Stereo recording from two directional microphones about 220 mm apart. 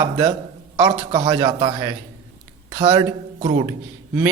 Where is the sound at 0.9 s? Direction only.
20° right (ahead or behind).